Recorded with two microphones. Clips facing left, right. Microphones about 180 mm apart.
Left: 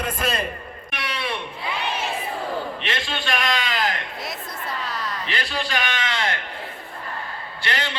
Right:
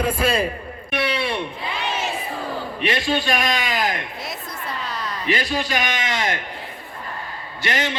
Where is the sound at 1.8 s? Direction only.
60° left (ahead or behind).